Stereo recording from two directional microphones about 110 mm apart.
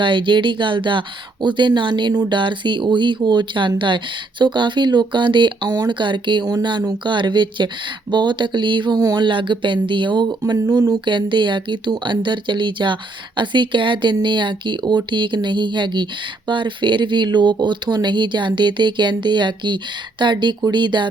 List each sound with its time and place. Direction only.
0.0 s speech: 45° right (ahead or behind)